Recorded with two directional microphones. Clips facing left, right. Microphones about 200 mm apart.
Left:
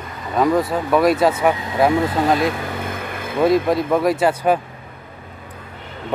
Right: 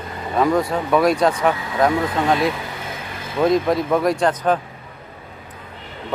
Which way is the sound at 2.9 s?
55° left (ahead or behind).